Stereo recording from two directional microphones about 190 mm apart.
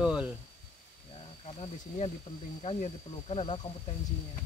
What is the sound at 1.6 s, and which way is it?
Speech, 30° left (ahead or behind).